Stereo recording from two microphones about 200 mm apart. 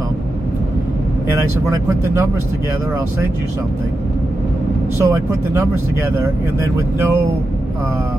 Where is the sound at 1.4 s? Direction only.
15° right (ahead or behind).